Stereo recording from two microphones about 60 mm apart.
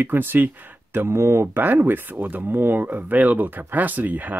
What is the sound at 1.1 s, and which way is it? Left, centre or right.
Speech, right.